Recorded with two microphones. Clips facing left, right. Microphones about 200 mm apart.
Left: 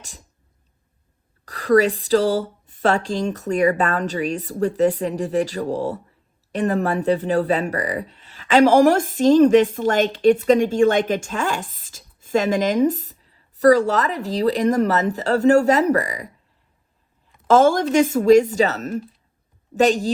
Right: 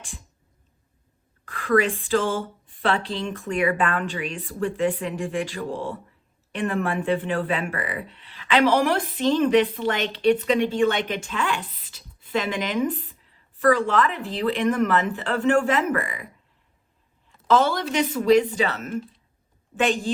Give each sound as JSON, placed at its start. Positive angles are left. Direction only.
{"t": 1.5, "sound": "speech", "side_deg": 40}
{"t": 17.5, "sound": "speech", "side_deg": 45}